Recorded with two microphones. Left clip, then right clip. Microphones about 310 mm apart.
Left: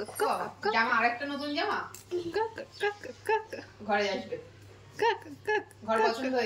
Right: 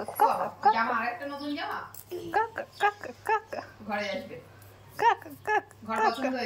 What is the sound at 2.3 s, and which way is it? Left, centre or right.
Speech, centre.